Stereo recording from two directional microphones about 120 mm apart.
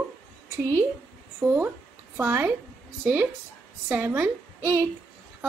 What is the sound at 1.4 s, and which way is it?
A child's voice, 15° right (ahead or behind).